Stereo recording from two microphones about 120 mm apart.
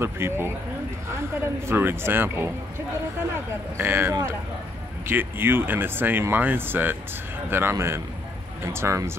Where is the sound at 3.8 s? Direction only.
20° right (ahead or behind).